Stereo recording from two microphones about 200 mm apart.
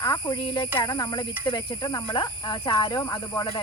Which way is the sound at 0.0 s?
20° left (ahead or behind).